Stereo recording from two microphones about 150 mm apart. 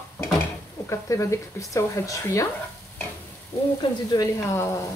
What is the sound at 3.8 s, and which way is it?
Speech, 25° left (ahead or behind).